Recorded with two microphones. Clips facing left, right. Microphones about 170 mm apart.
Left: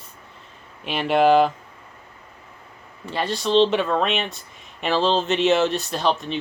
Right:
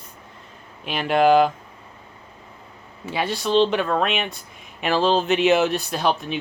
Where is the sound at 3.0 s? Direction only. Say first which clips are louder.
Even; 5° right (ahead or behind).